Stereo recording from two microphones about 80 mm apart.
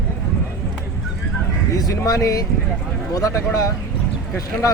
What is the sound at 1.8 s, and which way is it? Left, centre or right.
Speech, left.